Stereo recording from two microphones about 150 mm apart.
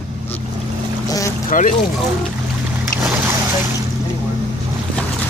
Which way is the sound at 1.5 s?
60° left (ahead or behind).